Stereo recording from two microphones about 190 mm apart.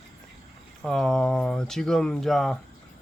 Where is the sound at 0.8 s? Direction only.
Centre (ahead or behind).